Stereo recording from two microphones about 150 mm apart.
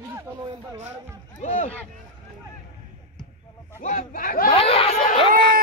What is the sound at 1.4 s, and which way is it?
Speech, 50° left (ahead or behind).